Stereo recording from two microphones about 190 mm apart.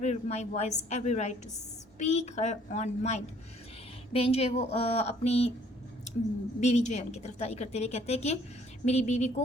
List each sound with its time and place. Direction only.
0.0 s a woman's voice: 35° left (ahead or behind)
6.6 s a woman's voice: 35° left (ahead or behind)